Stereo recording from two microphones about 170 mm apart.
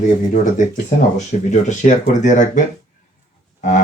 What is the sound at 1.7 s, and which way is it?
Speech, 45° left (ahead or behind).